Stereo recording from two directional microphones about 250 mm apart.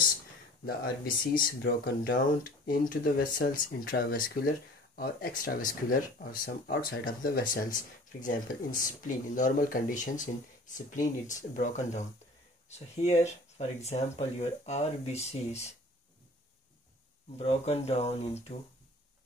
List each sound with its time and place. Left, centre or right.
0.7 s speech: left
17.4 s speech: left